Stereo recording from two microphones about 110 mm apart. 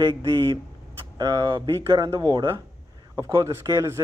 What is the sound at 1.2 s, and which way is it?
Speech, 40° right (ahead or behind).